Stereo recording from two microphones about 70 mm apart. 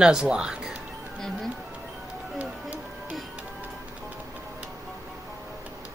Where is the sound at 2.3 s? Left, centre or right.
Right.